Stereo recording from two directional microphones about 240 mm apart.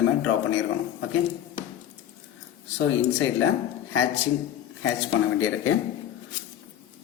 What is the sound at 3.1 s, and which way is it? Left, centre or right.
Speech, left.